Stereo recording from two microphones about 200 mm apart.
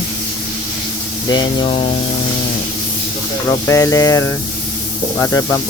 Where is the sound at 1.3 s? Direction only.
25° left (ahead or behind).